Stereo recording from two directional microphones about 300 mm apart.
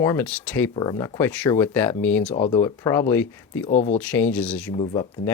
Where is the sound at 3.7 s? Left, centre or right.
Left.